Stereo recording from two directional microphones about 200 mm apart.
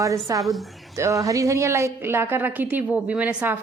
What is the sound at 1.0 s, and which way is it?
A woman's voice, 15° right (ahead or behind).